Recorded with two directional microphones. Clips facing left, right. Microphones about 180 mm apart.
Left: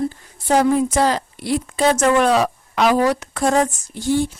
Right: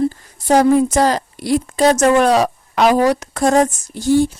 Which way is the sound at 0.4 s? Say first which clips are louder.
Right 4 dB; 40° right (ahead or behind).